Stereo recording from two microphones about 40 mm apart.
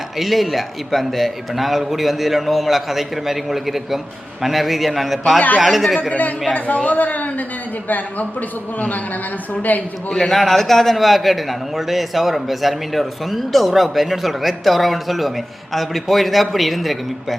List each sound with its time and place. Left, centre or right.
0.2 s a man's voice: centre
6.0 s a woman's voice: left
9.6 s a man's voice: left
10.1 s a man's voice: centre